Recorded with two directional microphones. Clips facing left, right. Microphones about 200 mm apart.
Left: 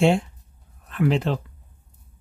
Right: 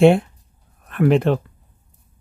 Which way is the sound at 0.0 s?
55° right (ahead or behind).